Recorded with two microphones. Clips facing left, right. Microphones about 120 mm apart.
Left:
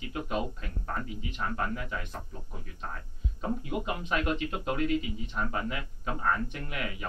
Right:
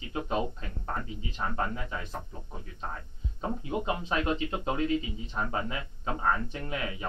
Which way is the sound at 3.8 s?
25° right (ahead or behind).